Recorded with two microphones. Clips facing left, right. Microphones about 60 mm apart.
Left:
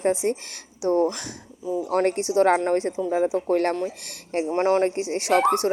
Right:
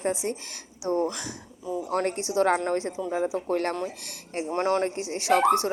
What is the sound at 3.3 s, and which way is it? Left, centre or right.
Speech, left.